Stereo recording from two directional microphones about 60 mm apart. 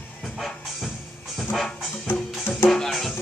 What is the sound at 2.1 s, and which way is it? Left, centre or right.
Music, left.